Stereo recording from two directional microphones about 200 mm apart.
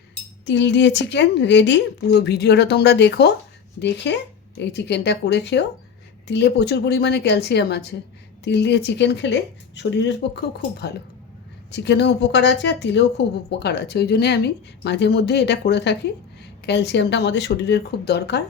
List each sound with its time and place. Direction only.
0.4 s speech: 60° left (ahead or behind)